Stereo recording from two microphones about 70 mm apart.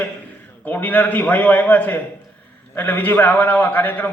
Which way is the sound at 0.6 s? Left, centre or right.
Left.